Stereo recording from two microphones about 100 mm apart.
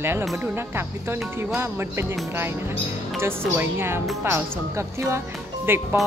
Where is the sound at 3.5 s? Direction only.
25° right (ahead or behind).